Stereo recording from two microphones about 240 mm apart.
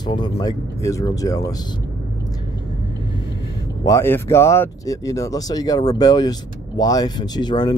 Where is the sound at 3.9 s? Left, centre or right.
Centre.